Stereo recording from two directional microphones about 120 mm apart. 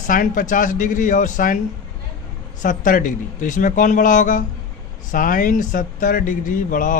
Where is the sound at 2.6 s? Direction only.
90° left.